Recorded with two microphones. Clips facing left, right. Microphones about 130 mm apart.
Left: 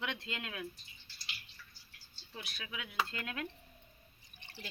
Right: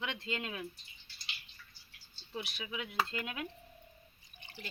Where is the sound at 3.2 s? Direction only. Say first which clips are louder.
Right 1 dB; 10° right (ahead or behind).